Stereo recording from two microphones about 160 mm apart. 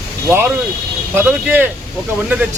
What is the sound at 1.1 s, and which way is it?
Speech, 10° right (ahead or behind).